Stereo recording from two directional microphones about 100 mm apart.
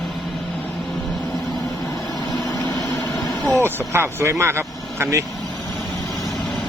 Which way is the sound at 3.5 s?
25° right (ahead or behind).